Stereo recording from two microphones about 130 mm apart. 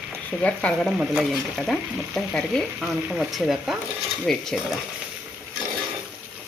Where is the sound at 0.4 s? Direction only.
10° left (ahead or behind).